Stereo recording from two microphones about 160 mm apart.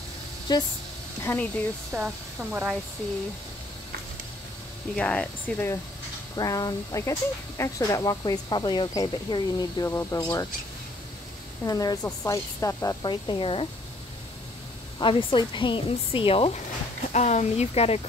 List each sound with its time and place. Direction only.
0.5 s speech: 25° left (ahead or behind)
1.2 s speech: 10° left (ahead or behind)
1.9 s speech: 15° right (ahead or behind)
4.9 s speech: 5° left (ahead or behind)
6.3 s speech: 25° left (ahead or behind)
11.6 s speech: 20° left (ahead or behind)
15.0 s speech: 30° left (ahead or behind)
17.1 s speech: 45° left (ahead or behind)